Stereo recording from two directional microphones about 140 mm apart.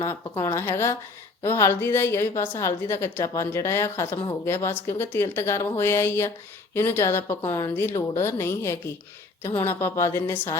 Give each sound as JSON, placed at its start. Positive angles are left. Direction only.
{"t": 0.0, "sound": "a woman's voice", "side_deg": 20}